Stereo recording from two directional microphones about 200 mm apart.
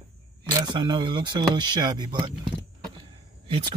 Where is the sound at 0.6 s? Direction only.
20° right (ahead or behind).